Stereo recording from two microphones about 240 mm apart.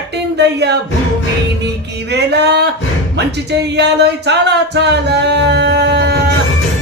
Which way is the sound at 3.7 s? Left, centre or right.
Right.